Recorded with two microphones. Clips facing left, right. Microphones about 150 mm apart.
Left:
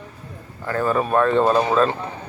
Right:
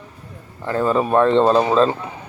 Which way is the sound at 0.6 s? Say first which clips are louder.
Right 2 dB; 25° right (ahead or behind).